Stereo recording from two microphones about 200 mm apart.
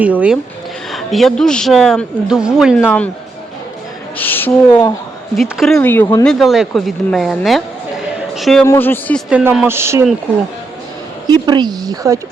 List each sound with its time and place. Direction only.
0.0 s speech: 5° right (ahead or behind)
4.2 s speech: 10° left (ahead or behind)
6.4 s speech: centre (ahead or behind)
8.6 s speech: 10° left (ahead or behind)
9.3 s speech: 5° right (ahead or behind)
11.3 s speech: 20° right (ahead or behind)